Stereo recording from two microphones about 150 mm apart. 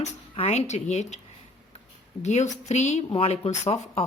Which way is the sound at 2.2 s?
50° left (ahead or behind).